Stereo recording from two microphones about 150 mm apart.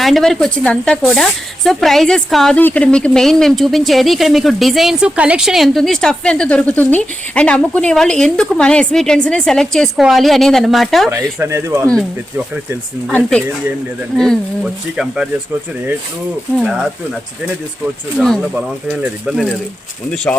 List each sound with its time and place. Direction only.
0.0 s speech: centre (ahead or behind)
11.1 s speech: 20° right (ahead or behind)
14.2 s speech: centre (ahead or behind)
16.6 s speech: 5° right (ahead or behind)
18.5 s speech: 5° right (ahead or behind)